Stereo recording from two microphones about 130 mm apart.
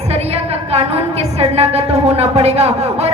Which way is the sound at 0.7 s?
50° right (ahead or behind).